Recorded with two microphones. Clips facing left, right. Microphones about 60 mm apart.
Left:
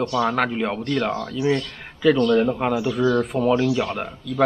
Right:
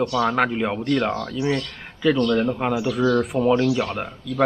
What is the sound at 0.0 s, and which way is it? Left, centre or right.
Speech, centre.